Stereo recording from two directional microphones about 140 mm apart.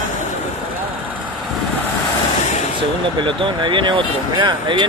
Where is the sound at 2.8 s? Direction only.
35° right (ahead or behind).